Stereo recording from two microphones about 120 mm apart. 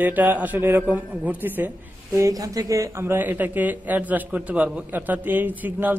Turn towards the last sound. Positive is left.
turn(degrees=-15)  # may be behind; listen again after turning